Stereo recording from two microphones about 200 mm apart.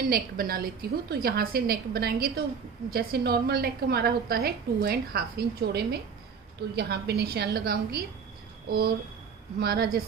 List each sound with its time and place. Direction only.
0.1 s a woman's voice: 50° right (ahead or behind)